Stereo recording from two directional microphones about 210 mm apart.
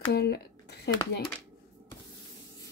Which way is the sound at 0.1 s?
50° left (ahead or behind).